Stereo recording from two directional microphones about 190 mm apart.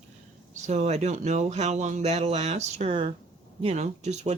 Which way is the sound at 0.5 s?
35° right (ahead or behind).